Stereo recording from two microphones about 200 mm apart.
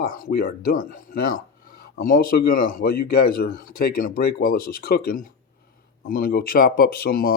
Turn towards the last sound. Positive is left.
turn(degrees=50)  # may be behind; listen again after turning